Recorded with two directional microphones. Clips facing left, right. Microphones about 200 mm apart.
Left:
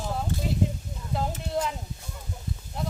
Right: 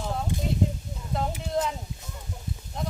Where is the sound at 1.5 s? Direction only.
Centre (ahead or behind).